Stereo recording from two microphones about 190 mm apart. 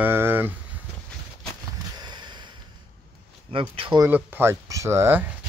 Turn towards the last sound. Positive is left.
turn(degrees=-15)  # may be behind; listen again after turning